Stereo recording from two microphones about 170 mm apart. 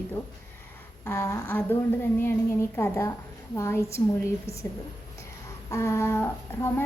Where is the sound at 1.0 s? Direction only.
15° left (ahead or behind).